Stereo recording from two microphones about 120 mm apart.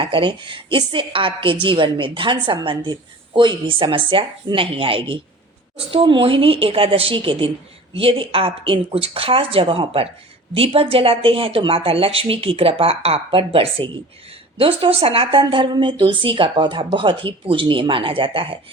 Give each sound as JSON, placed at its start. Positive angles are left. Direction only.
{"t": 0.0, "sound": "a woman's voice", "side_deg": -45}